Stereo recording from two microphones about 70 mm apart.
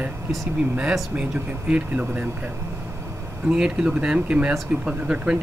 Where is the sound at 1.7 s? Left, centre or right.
Centre.